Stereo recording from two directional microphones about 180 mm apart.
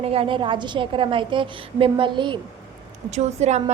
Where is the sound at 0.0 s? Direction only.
30° right (ahead or behind).